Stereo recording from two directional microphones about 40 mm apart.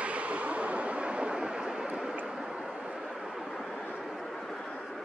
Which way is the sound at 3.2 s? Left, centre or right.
Centre.